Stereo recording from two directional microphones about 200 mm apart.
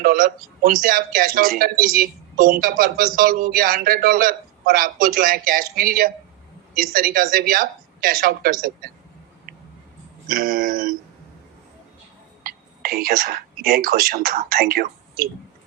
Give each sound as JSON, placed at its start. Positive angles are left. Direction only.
{"t": 0.0, "sound": "speech", "side_deg": -45}
{"t": 10.2, "sound": "speech", "side_deg": -45}
{"t": 12.4, "sound": "speech", "side_deg": -50}